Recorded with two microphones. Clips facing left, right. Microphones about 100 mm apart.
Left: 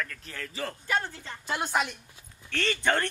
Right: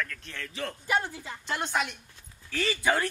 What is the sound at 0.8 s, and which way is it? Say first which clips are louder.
Speech: right 2 dB; 15° right (ahead or behind).